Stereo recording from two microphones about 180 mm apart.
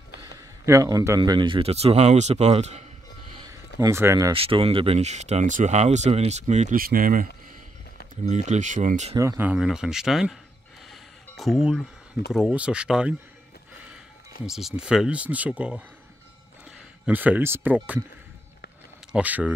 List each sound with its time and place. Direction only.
0.7 s speech: 20° right (ahead or behind); by 2.8 s 35° right (ahead or behind)
3.3 s a sound: 15° right (ahead or behind)
4.3 s speech: 30° right (ahead or behind)
9.1 s speech: 15° right (ahead or behind)
10.9 s a sound: centre (ahead or behind)
12.3 s speech: 5° right (ahead or behind)
14.4 s speech: centre (ahead or behind)
17.0 s speech: 10° right (ahead or behind)
19.1 s speech: 5° right (ahead or behind)